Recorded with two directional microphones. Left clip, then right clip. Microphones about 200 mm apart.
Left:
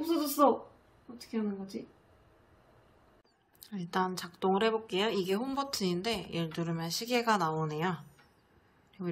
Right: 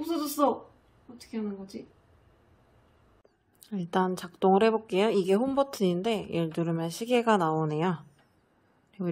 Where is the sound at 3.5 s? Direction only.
45° right (ahead or behind).